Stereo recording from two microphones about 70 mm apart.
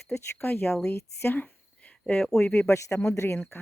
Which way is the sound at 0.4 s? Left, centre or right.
Left.